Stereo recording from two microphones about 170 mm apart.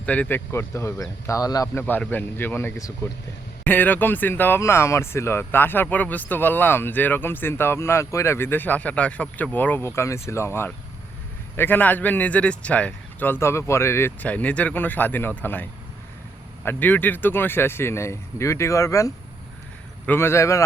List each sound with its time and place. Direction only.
0.0 s speech: 10° left (ahead or behind)
1.8 s speech: 10° left (ahead or behind)